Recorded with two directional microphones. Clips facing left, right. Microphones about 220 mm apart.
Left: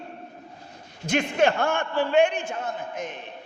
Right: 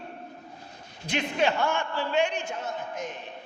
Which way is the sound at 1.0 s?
50° left (ahead or behind).